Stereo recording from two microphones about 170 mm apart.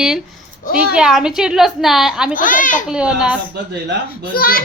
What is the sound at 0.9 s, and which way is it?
A woman's voice, 5° right (ahead or behind).